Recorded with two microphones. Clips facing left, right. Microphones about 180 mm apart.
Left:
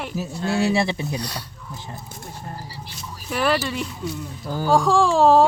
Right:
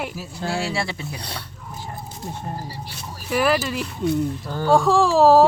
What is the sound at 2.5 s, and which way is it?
Speech, 45° right (ahead or behind).